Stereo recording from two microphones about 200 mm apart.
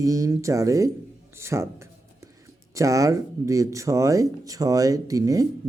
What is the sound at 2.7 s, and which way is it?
Speech, 15° right (ahead or behind).